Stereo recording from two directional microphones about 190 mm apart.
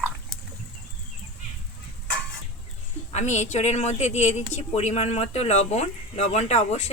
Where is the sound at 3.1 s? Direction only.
35° left (ahead or behind).